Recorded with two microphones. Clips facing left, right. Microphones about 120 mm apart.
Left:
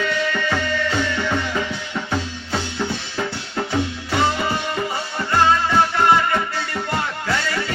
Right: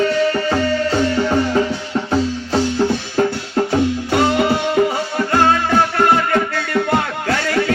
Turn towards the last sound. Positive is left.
turn(degrees=-55)  # may be behind; listen again after turning